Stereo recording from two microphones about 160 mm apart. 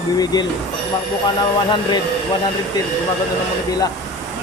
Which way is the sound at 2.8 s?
25° left (ahead or behind).